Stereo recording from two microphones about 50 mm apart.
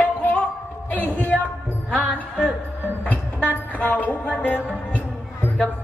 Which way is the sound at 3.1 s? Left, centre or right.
Left.